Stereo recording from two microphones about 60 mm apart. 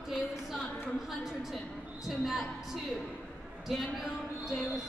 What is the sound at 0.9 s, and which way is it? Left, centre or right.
A woman's voice, centre.